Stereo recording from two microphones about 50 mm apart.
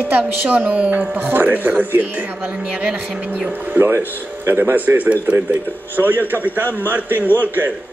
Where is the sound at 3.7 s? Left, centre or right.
Right.